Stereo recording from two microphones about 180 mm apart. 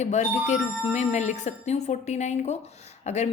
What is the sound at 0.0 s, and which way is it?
A woman's voice, 40° left (ahead or behind).